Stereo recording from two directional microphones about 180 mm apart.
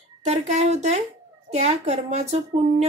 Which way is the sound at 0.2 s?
40° right (ahead or behind).